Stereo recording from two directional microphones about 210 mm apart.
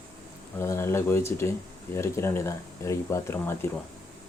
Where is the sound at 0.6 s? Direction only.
10° left (ahead or behind).